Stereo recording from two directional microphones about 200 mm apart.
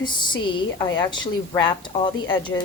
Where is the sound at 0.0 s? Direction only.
25° left (ahead or behind).